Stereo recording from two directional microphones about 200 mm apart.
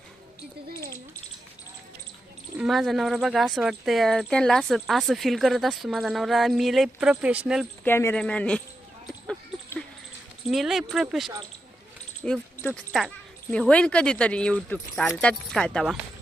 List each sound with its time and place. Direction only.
0.7 s speech: 50° right (ahead or behind)
2.6 s speech: centre (ahead or behind)
7.9 s speech: 10° left (ahead or behind)
10.5 s speech: centre (ahead or behind)